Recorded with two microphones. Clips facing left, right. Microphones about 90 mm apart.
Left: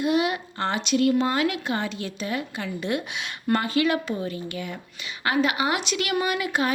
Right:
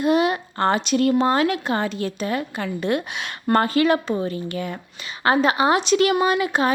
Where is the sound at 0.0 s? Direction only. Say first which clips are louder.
Right 4 dB; 40° right (ahead or behind).